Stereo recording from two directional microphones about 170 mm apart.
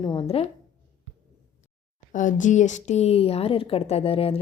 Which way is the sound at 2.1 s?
50° left (ahead or behind).